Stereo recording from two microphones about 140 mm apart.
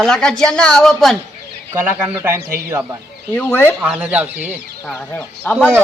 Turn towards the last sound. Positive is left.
turn(degrees=15)  # may be behind; listen again after turning